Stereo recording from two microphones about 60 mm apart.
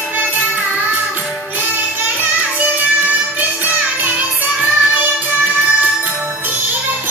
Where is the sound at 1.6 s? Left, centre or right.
Right.